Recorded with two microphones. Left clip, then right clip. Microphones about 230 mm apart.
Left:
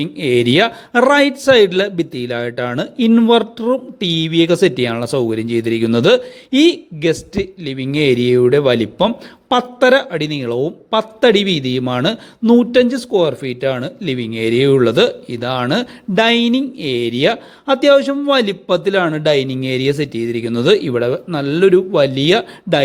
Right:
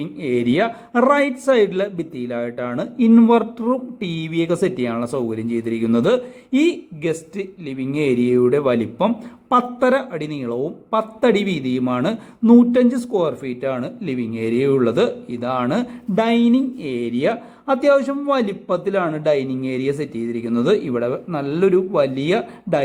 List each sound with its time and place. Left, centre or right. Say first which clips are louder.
0.0 s speech: left 6 dB; left
4.1 s speech: left 8 dB; left